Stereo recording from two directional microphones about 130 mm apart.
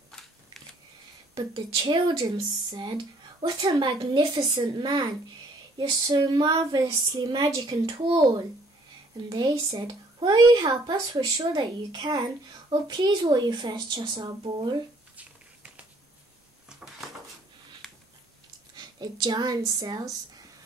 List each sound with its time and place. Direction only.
1.5 s a child's voice: 35° right (ahead or behind)
15.1 s a sound: 10° right (ahead or behind)
18.8 s a child's voice: 30° right (ahead or behind)